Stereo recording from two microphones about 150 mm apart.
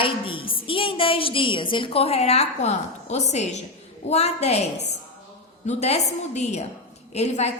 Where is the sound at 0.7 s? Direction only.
35° left (ahead or behind).